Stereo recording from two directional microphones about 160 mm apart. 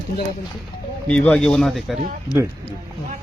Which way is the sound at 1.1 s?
5° left (ahead or behind).